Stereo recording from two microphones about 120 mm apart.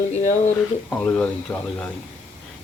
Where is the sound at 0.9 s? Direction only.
10° left (ahead or behind).